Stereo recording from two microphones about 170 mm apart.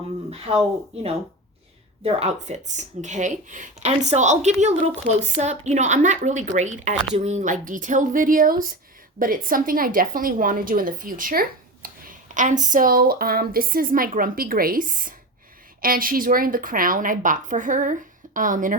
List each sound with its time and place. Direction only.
2.0 s a woman's voice: 40° right (ahead or behind)